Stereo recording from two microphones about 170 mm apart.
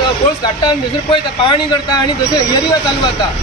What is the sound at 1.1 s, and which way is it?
Speech, 30° left (ahead or behind).